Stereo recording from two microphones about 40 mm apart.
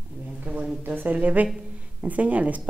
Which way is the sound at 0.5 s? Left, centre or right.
Right.